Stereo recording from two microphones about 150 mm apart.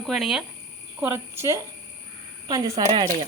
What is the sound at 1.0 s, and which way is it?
A woman's voice, 15° right (ahead or behind).